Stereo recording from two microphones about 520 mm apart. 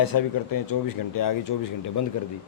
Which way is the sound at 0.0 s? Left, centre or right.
Left.